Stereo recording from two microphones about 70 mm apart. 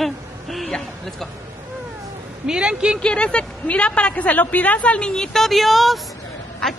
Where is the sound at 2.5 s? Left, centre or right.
Centre.